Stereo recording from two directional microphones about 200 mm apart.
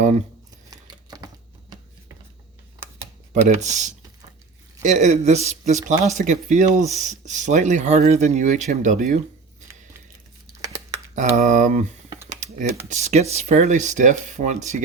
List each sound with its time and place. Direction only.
0.7 s a sound: 20° right (ahead or behind)
3.4 s speech: 35° right (ahead or behind)
11.1 s speech: 40° right (ahead or behind)
12.1 s computer keyboard: 15° right (ahead or behind)
12.9 s speech: 35° right (ahead or behind)